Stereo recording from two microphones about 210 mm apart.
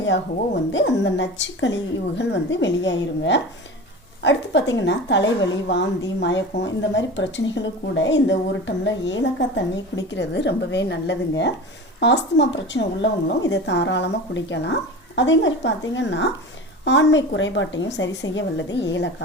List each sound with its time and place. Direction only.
0.7 s a woman's voice: 60° left (ahead or behind)